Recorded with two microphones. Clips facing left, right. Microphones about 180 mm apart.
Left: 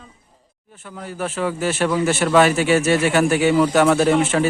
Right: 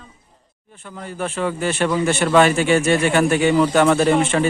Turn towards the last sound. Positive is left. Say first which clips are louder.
# even
turn(degrees=5)  # may be behind; listen again after turning